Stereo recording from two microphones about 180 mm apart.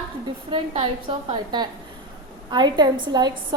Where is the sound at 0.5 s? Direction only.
30° right (ahead or behind).